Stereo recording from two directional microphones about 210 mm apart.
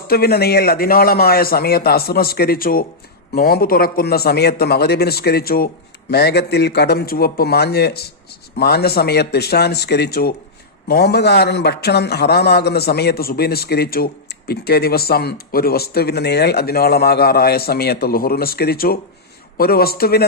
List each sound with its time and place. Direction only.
0.1 s a man's voice: 50° left (ahead or behind)